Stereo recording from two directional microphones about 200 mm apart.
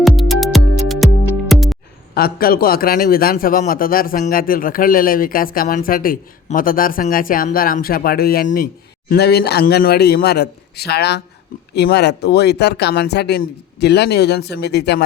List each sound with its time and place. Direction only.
0.0 s music: centre (ahead or behind)
2.1 s a man's voice: 50° left (ahead or behind)